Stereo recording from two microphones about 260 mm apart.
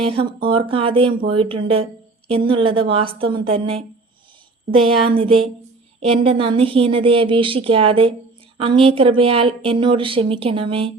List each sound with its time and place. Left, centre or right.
0.1 s a woman's voice: centre
5.0 s a woman's voice: right